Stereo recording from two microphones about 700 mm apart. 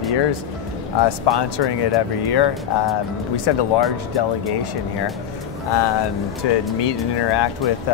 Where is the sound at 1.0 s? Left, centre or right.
Left.